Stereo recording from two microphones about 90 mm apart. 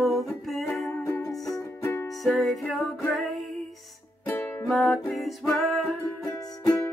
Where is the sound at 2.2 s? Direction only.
Centre (ahead or behind).